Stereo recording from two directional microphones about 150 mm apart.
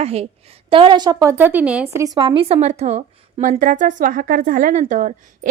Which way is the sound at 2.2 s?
35° right (ahead or behind).